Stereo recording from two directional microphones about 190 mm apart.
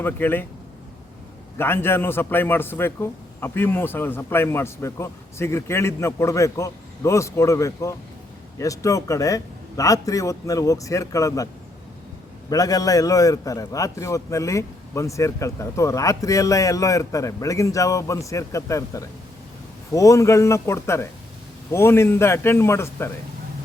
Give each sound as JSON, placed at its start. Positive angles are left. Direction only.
{"t": 0.0, "sound": "a man's voice", "side_deg": 10}
{"t": 1.5, "sound": "a man's voice", "side_deg": 10}
{"t": 12.5, "sound": "a man's voice", "side_deg": 20}